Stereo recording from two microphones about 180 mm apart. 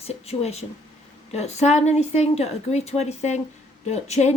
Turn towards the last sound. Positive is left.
turn(degrees=40)  # may be behind; listen again after turning